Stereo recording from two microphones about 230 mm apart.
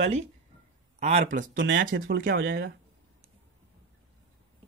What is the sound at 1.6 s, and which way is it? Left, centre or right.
Speech, right.